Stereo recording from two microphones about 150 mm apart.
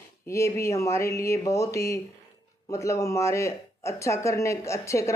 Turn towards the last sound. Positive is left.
turn(degrees=20)  # may be behind; listen again after turning